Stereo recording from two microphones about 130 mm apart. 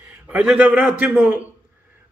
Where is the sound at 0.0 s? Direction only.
10° right (ahead or behind).